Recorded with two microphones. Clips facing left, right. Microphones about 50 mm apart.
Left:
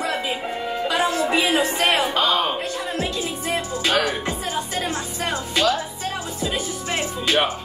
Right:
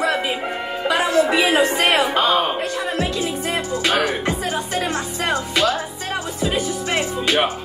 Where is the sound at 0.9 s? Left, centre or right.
Right.